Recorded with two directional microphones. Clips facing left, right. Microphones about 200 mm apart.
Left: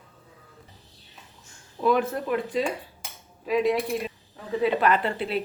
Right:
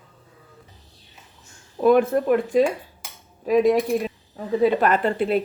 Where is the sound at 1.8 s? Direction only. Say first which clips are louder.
Right 7 dB; 50° right (ahead or behind).